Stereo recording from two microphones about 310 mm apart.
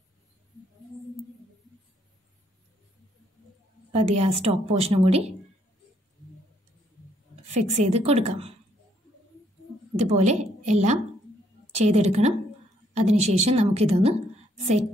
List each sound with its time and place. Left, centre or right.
3.9 s a woman's voice: right
7.4 s a woman's voice: right
9.9 s a woman's voice: right